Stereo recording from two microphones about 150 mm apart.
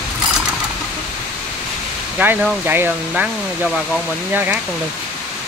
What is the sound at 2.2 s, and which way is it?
Speech, 15° right (ahead or behind).